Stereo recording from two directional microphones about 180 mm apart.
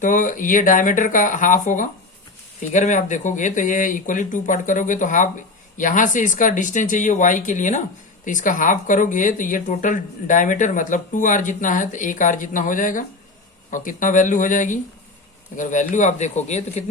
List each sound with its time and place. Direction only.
0.0 s a man's voice: 45° left (ahead or behind)